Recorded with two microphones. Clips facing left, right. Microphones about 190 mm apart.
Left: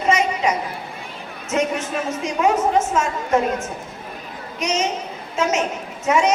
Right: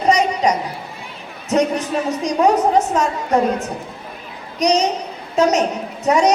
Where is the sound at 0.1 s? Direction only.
35° right (ahead or behind).